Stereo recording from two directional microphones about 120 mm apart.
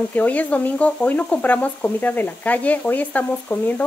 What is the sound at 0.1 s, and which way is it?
Speech, 15° left (ahead or behind).